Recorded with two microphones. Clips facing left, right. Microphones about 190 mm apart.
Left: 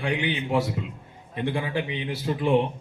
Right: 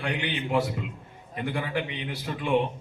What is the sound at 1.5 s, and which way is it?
A man's voice, 25° left (ahead or behind).